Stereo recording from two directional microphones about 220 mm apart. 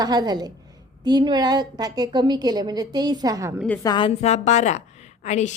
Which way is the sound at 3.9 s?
25° left (ahead or behind).